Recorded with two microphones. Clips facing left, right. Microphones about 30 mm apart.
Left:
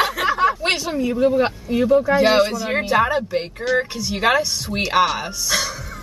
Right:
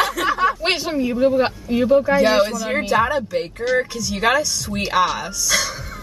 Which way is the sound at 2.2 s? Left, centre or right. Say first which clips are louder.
Even; centre.